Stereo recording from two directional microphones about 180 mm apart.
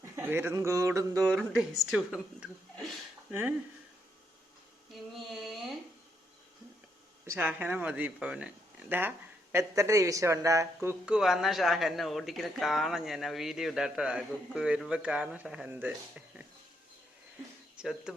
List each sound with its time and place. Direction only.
0.0 s a man's voice: 10° right (ahead or behind)
1.3 s speech: centre (ahead or behind)
4.9 s a sound: centre (ahead or behind)
7.3 s speech: 10° right (ahead or behind)
10.8 s speech: 5° right (ahead or behind)
17.7 s speech: 5° right (ahead or behind)